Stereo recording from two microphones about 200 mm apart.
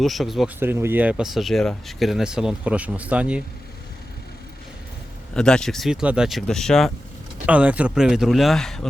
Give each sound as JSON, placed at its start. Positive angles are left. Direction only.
{"t": 0.0, "sound": "speech", "side_deg": 0}
{"t": 5.3, "sound": "speech", "side_deg": 5}